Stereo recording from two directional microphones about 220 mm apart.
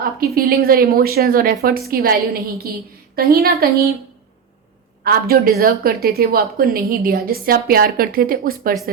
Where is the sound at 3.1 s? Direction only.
45° right (ahead or behind).